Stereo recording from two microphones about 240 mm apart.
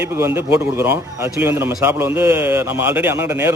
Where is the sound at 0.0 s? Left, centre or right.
Centre.